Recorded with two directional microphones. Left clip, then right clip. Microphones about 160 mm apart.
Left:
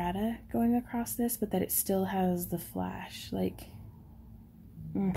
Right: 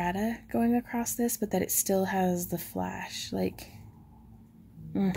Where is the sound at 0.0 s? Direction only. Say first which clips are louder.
Right 3 dB; 20° right (ahead or behind).